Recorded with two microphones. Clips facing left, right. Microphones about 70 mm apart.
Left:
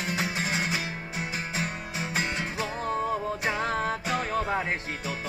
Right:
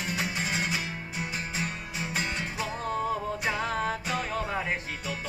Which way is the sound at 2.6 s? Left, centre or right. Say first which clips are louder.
Left 1 dB; left.